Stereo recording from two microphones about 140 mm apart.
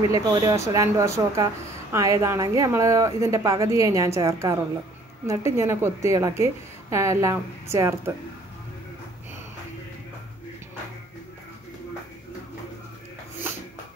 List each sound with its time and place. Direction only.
0.1 s speech: 25° right (ahead or behind)